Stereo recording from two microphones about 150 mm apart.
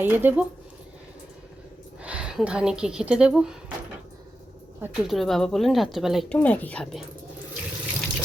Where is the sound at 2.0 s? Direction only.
5° right (ahead or behind).